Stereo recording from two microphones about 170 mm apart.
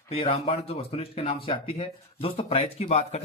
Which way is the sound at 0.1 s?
30° left (ahead or behind).